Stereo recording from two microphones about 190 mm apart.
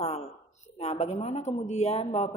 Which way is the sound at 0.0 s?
35° left (ahead or behind).